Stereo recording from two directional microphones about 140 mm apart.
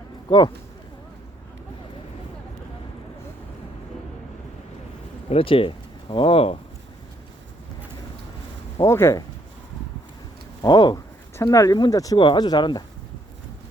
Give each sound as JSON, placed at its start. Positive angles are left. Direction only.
{"t": 0.3, "sound": "speech", "side_deg": 35}
{"t": 5.3, "sound": "speech", "side_deg": 40}
{"t": 8.9, "sound": "speech", "side_deg": 20}
{"t": 10.6, "sound": "speech", "side_deg": 30}